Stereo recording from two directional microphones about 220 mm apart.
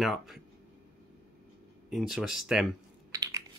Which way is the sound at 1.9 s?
Centre (ahead or behind).